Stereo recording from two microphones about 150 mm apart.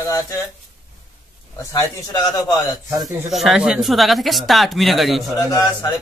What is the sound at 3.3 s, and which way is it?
Speech, centre (ahead or behind).